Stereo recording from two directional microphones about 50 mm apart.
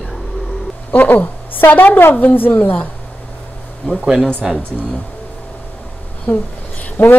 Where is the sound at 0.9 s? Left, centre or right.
Left.